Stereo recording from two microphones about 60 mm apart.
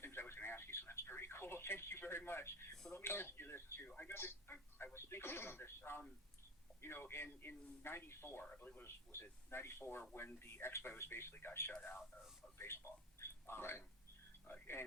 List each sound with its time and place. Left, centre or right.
0.0 s radio: left
2.9 s speech: left
3.8 s speech: left
4.1 s speech: left
8.4 s speech: left
9.1 s speech: left
12.5 s a sound: left